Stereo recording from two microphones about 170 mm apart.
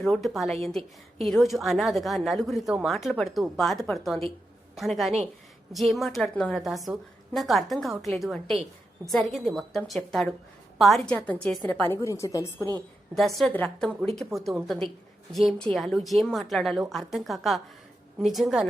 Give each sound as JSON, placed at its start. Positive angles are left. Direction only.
{"t": 0.0, "sound": "a woman's voice", "side_deg": 0}
{"t": 12.7, "sound": "a woman's voice", "side_deg": 5}